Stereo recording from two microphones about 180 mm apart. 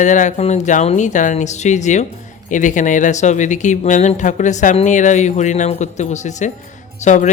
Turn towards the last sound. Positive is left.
turn(degrees=40)  # may be behind; listen again after turning